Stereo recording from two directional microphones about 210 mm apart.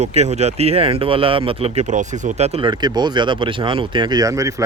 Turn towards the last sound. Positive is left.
turn(degrees=-15)  # may be behind; listen again after turning